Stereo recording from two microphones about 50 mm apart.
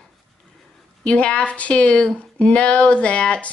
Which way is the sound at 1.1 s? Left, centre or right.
Left.